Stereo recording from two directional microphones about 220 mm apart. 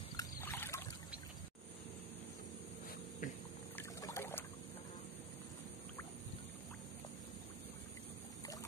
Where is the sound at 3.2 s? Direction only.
35° left (ahead or behind).